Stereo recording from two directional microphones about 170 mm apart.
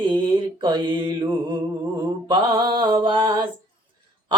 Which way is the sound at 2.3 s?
25° right (ahead or behind).